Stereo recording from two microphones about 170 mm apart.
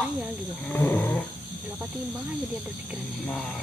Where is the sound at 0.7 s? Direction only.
10° left (ahead or behind).